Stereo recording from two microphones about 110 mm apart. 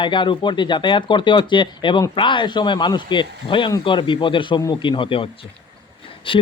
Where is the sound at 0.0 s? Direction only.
45° left (ahead or behind).